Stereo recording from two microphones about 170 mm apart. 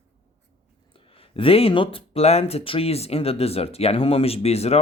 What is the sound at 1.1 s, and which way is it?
Speech, 35° left (ahead or behind).